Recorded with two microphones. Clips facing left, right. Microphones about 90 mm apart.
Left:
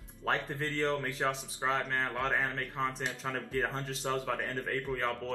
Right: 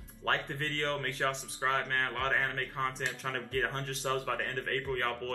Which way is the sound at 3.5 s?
5° left (ahead or behind).